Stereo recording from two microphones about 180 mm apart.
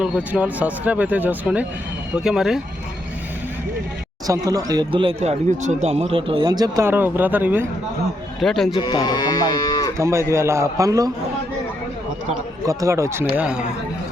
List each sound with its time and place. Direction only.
0.0 s speech: 5° right (ahead or behind)
4.3 s speech: 20° right (ahead or behind)
8.4 s speech: centre (ahead or behind)
8.7 s moo: 25° left (ahead or behind)
10.0 s speech: 15° right (ahead or behind)
12.6 s speech: 15° right (ahead or behind)
13.3 s speech: 5° right (ahead or behind)